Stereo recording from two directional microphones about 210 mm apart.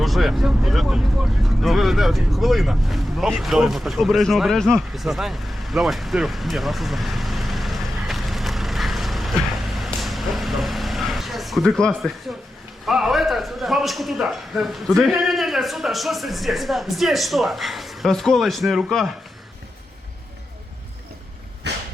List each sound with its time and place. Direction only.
0.0 s a man's voice: centre (ahead or behind)